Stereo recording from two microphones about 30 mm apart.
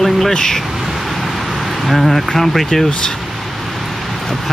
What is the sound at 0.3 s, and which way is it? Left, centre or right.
Speech, centre.